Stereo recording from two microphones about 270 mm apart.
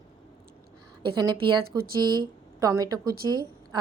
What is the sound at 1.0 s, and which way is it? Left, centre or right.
A woman's voice, centre.